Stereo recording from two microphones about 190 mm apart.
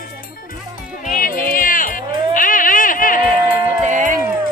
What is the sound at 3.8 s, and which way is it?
Music, 40° right (ahead or behind).